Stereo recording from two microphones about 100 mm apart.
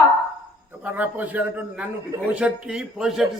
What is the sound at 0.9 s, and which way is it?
A man's voice, 15° right (ahead or behind).